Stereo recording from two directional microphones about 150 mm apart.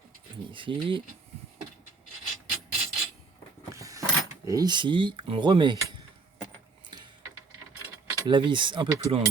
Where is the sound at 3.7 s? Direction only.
20° right (ahead or behind).